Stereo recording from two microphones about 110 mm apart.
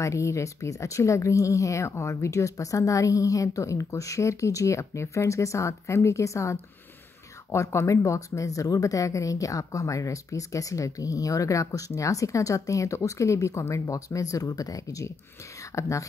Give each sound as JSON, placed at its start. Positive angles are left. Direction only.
{"t": 0.0, "sound": "speech", "side_deg": 30}